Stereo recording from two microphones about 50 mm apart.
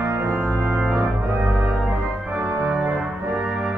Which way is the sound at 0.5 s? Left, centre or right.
Right.